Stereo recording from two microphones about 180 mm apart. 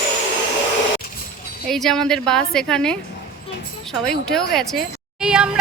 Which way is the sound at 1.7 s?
Centre (ahead or behind).